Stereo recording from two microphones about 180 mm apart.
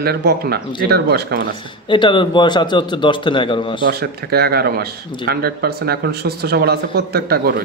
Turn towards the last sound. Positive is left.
turn(degrees=-60)  # may be behind; listen again after turning